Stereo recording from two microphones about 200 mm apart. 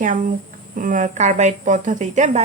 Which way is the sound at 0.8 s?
40° right (ahead or behind).